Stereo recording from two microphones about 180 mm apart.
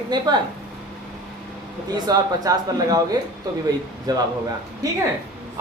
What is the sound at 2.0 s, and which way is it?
Speech, 20° right (ahead or behind).